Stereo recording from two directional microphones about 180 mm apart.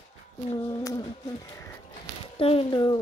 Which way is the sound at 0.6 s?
15° left (ahead or behind).